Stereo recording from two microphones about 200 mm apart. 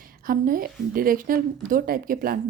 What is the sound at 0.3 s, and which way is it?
Speech, 45° right (ahead or behind).